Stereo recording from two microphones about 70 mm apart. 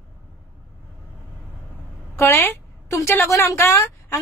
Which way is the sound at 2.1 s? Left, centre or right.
Left.